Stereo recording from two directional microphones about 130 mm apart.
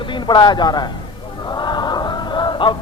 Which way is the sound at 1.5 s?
35° left (ahead or behind).